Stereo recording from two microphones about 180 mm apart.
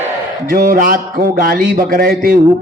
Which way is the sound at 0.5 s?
50° right (ahead or behind).